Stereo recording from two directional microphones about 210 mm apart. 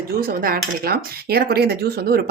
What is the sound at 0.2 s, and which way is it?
Speech, 45° right (ahead or behind).